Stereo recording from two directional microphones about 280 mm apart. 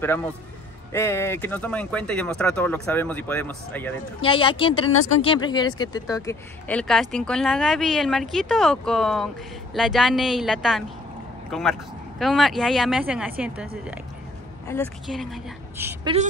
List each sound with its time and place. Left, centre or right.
0.0 s a man's voice: centre
4.2 s speech: centre